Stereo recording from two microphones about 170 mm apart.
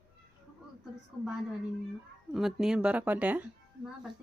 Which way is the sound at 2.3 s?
Centre (ahead or behind).